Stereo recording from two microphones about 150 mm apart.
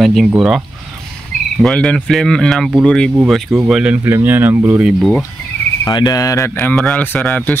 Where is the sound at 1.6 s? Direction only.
5° left (ahead or behind).